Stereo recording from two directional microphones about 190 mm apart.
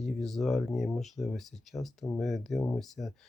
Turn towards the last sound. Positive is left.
turn(degrees=0)  # may be behind; listen again after turning